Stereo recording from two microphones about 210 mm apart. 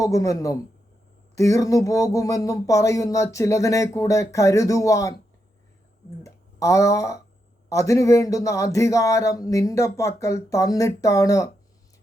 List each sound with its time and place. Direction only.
0.0 s speech: 15° left (ahead or behind)
6.2 s speech: 15° left (ahead or behind)